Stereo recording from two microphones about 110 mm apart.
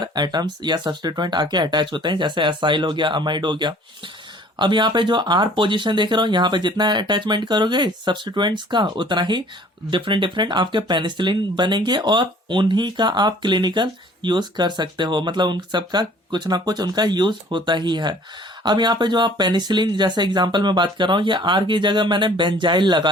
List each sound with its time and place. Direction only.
0.0 s speech: 40° right (ahead or behind)